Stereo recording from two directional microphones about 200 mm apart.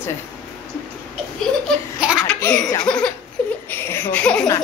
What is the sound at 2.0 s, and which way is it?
Baby laughter, 5° right (ahead or behind).